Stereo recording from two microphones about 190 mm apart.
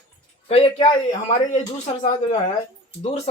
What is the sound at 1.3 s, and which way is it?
Speech, 40° left (ahead or behind).